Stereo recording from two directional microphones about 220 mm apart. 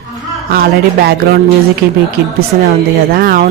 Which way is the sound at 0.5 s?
45° right (ahead or behind).